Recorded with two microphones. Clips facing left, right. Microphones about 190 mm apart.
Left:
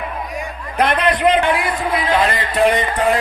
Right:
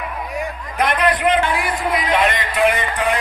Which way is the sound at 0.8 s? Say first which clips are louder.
Left 2 dB; 25° left (ahead or behind).